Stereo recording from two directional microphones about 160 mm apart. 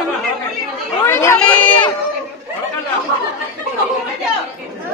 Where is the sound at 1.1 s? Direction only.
15° left (ahead or behind).